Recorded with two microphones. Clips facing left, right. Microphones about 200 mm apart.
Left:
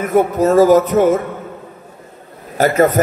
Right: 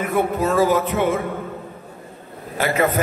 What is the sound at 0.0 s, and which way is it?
A man's voice, 40° left (ahead or behind).